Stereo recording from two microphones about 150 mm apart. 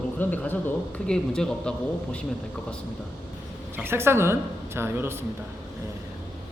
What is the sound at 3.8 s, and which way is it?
Speech, 15° right (ahead or behind).